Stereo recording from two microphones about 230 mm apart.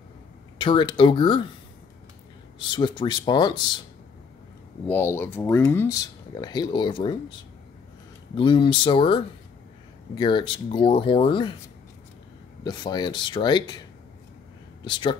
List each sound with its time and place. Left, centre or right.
0.6 s speech: left
2.6 s speech: centre
4.8 s speech: centre
8.4 s speech: left
12.6 s speech: centre
14.9 s speech: left